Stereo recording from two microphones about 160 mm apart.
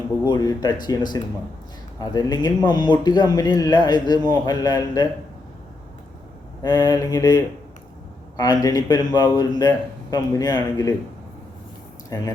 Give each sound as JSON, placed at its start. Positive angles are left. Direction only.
{"t": 0.3, "sound": "speech", "side_deg": 25}
{"t": 6.6, "sound": "speech", "side_deg": 25}
{"t": 8.6, "sound": "speech", "side_deg": 25}